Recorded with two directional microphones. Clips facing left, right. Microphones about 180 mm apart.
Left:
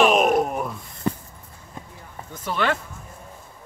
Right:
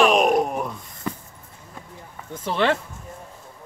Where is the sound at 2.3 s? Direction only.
25° right (ahead or behind).